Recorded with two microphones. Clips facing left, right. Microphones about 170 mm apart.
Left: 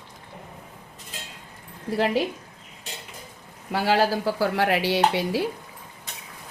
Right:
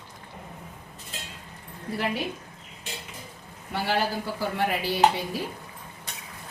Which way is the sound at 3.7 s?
90° left.